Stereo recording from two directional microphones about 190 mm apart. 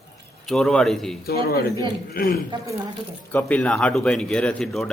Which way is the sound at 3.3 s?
5° left (ahead or behind).